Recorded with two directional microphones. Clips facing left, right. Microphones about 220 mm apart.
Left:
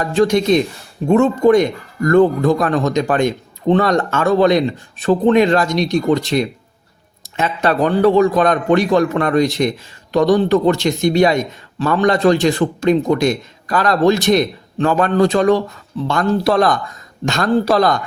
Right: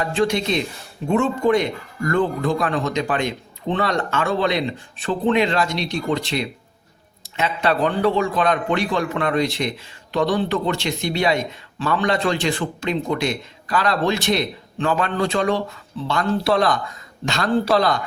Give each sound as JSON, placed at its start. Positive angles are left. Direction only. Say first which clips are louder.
{"t": 0.0, "sound": "a man's voice", "louder": "left 6 dB", "side_deg": 45}